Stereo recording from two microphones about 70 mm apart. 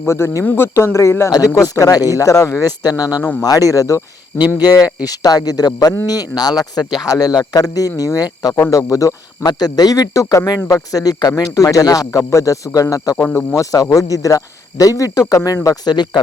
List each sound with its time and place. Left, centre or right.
0.0 s speech: left
1.3 s speech: left
2.8 s speech: left
4.4 s speech: left
9.5 s speech: left
14.1 s speech: left